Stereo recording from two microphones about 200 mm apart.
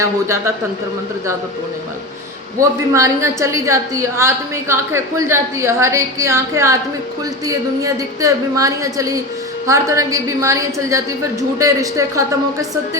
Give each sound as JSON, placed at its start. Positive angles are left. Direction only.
{"t": 0.0, "sound": "a woman's voice", "side_deg": -15}
{"t": 2.6, "sound": "a woman's voice", "side_deg": -15}